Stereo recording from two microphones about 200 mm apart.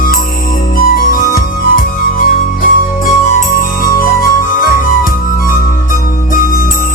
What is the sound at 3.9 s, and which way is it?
Music, 45° left (ahead or behind).